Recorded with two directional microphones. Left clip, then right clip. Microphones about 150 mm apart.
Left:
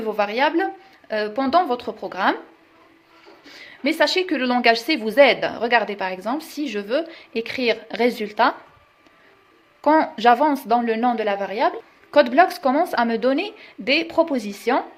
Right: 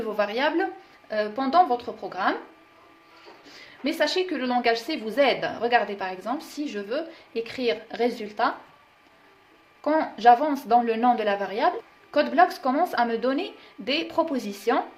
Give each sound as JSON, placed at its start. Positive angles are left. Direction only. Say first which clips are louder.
{"t": 0.0, "sound": "speech", "louder": "left 4 dB", "side_deg": 30}
{"t": 1.1, "sound": "speech", "louder": "left 2 dB", "side_deg": 45}
{"t": 3.4, "sound": "a woman's voice", "louder": "left 6 dB", "side_deg": 45}
{"t": 9.8, "sound": "a woman's voice", "louder": "left 3 dB", "side_deg": 45}
{"t": 12.1, "sound": "a woman's voice", "louder": "left 5 dB", "side_deg": 45}